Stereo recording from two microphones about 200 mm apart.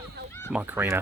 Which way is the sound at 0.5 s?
10° right (ahead or behind).